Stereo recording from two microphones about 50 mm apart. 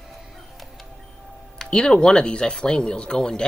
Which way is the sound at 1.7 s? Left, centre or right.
Centre.